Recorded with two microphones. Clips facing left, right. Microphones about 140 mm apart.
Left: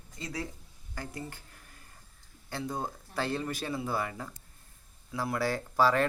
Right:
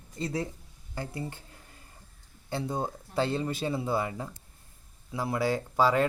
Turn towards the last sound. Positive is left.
turn(degrees=-20)  # may be behind; listen again after turning